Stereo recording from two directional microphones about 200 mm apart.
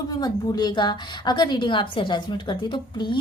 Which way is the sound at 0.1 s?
20° left (ahead or behind).